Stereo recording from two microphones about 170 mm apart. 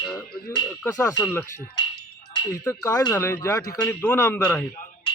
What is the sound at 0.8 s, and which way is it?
Speech, 20° left (ahead or behind).